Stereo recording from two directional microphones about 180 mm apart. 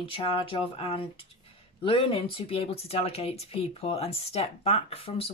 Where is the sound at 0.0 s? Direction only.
30° left (ahead or behind).